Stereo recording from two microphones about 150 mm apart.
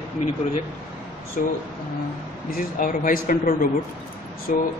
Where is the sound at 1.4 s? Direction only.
70° left (ahead or behind).